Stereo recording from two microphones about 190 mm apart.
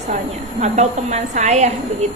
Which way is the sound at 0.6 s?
35° right (ahead or behind).